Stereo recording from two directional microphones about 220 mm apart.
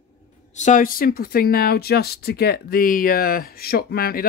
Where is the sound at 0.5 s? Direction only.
35° left (ahead or behind).